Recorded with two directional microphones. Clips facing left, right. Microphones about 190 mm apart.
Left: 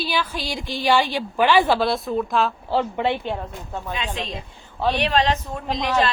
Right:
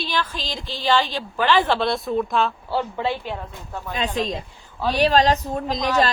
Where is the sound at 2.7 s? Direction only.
20° left (ahead or behind).